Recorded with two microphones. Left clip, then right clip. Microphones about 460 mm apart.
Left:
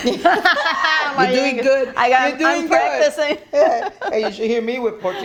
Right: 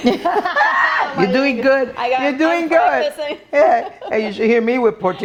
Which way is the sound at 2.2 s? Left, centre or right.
Right.